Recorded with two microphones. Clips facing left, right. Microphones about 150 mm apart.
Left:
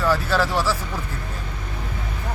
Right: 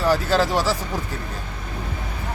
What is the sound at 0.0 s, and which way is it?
Speech, 15° right (ahead or behind).